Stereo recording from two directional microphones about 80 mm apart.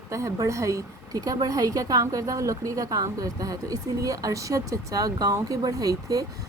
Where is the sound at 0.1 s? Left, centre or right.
Right.